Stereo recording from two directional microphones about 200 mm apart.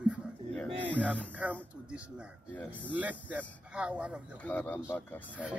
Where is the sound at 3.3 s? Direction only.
5° right (ahead or behind).